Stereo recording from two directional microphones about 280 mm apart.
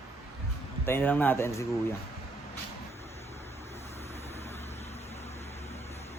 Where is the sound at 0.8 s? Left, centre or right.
Centre.